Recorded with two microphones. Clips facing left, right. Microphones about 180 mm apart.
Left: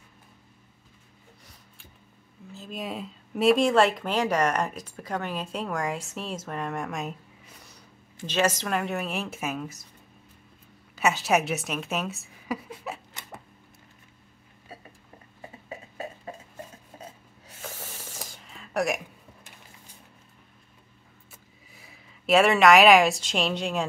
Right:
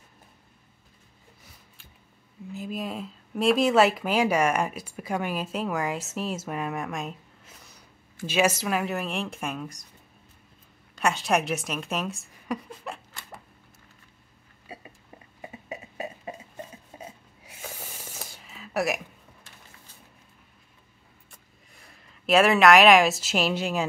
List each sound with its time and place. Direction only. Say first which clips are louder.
2.7 s speech: left 1 dB; centre (ahead or behind)
8.3 s speech: right 1 dB; 10° right (ahead or behind)
11.0 s speech: left 1 dB; 5° left (ahead or behind)
15.4 s a sound: right 2 dB; 15° right (ahead or behind)
21.3 s speech: left 3 dB; 5° left (ahead or behind)